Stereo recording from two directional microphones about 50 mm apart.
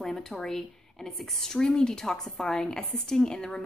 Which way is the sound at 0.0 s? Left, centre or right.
Centre.